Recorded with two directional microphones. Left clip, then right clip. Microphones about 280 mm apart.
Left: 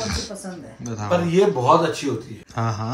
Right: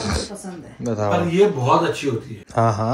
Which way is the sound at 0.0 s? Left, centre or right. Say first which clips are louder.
Right 2 dB; centre.